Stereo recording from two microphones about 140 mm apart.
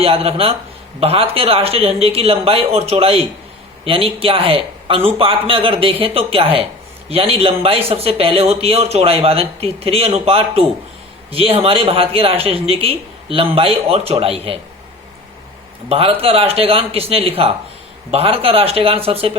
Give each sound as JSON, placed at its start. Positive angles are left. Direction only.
{"t": 0.0, "sound": "a man's voice", "side_deg": -45}
{"t": 15.9, "sound": "speech", "side_deg": -40}